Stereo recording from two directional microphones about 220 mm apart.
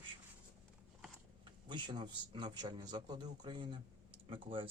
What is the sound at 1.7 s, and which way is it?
Speech, 20° right (ahead or behind).